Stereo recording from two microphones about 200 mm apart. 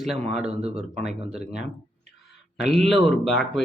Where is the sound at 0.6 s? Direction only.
30° right (ahead or behind).